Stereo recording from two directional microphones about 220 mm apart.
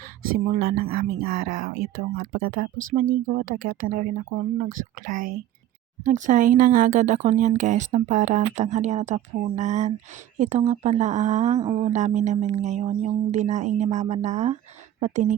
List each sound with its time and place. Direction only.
0.4 s speech: 40° right (ahead or behind)